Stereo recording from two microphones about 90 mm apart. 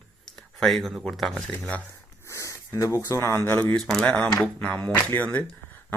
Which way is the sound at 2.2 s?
35° left (ahead or behind).